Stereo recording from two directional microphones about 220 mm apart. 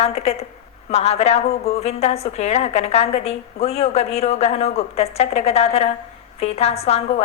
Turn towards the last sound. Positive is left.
turn(degrees=30)  # may be behind; listen again after turning